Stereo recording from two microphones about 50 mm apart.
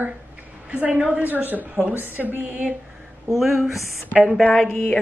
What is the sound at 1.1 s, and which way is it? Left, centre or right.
A woman's voice, right.